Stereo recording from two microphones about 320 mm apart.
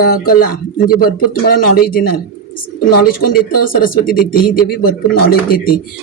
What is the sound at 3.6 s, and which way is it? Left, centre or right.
Speech, left.